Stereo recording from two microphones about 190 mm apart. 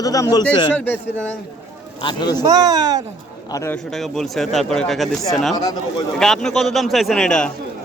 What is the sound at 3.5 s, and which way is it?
Speech, 15° left (ahead or behind).